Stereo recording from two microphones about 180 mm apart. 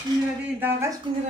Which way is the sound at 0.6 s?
15° right (ahead or behind).